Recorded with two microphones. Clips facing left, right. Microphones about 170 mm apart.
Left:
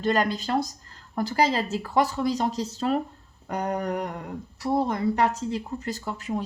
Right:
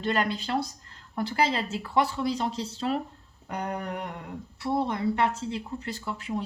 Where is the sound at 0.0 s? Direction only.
40° left (ahead or behind).